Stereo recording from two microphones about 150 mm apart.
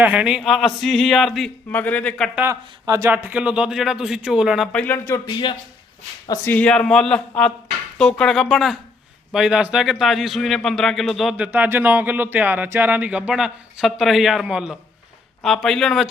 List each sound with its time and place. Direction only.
0.0 s a man's voice: 10° right (ahead or behind); by 2.3 s 5° left (ahead or behind)
2.3 s a man's voice: 15° right (ahead or behind)
3.1 s a man's voice: 10° right (ahead or behind)
4.7 s speech: 10° left (ahead or behind)
5.2 s speech: 30° left (ahead or behind)
6.2 s a man's voice: 20° left (ahead or behind); by 16.0 s centre (ahead or behind)